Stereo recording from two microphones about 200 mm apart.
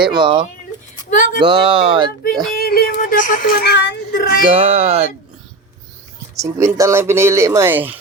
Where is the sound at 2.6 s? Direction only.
50° left (ahead or behind).